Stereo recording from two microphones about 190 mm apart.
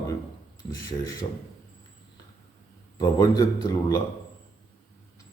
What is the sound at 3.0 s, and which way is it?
Speech, 20° left (ahead or behind).